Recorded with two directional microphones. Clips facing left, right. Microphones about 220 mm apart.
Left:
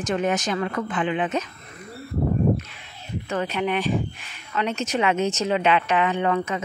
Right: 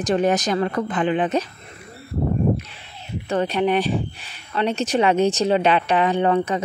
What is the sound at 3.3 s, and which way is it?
Speech, 35° right (ahead or behind).